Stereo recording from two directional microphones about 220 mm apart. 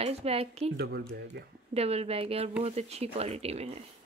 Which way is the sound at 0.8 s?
45° right (ahead or behind).